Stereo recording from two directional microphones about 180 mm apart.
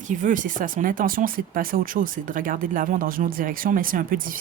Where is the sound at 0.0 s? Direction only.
45° right (ahead or behind).